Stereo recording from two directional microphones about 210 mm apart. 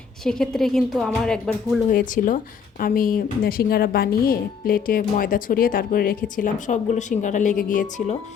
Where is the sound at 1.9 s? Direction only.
40° left (ahead or behind).